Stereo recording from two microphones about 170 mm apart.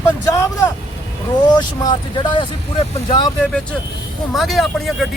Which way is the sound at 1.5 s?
25° left (ahead or behind).